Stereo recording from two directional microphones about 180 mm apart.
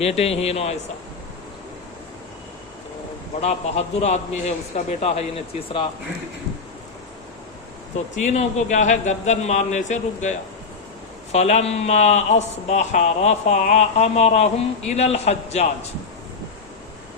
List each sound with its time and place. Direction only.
0.0 s a man's voice: 35° left (ahead or behind)
3.4 s a man's voice: 40° left (ahead or behind)
8.3 s a man's voice: 40° left (ahead or behind)